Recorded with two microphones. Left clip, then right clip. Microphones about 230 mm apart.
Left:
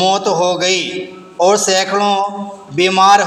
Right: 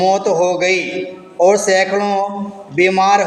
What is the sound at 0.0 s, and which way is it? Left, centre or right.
A man's voice, centre.